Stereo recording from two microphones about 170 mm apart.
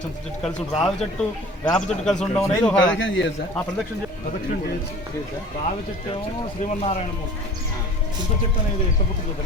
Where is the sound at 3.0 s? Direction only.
90° left.